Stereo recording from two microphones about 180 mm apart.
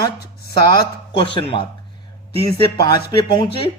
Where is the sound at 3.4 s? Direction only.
30° left (ahead or behind).